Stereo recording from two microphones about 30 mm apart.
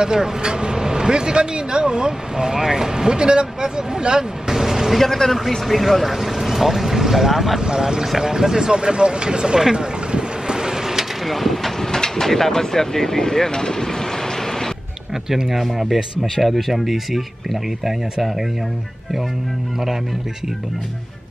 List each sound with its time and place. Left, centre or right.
0.0 s speech: right
4.5 s vehicle: centre
4.9 s speech: centre
7.6 s speech: right
9.6 s speech: centre
10.1 s vehicle: right
11.2 s vehicle: centre
11.8 s speech: centre
15.2 s speech: centre